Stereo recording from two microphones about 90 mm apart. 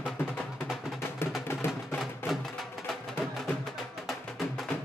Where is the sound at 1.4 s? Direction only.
30° left (ahead or behind).